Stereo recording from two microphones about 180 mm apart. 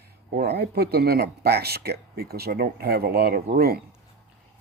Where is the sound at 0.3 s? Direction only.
65° right (ahead or behind).